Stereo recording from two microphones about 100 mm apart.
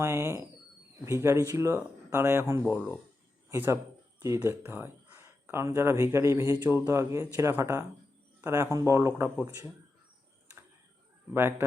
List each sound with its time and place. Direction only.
0.0 s speech: 30° right (ahead or behind)
11.3 s speech: 25° right (ahead or behind)